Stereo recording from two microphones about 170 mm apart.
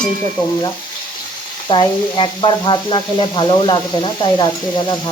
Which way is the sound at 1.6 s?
25° left (ahead or behind).